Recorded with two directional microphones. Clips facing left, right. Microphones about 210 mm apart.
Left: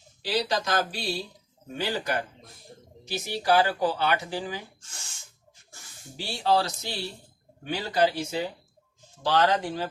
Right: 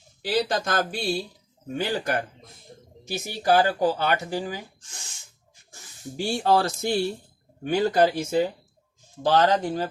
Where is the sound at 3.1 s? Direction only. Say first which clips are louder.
Right 2 dB; 45° right (ahead or behind).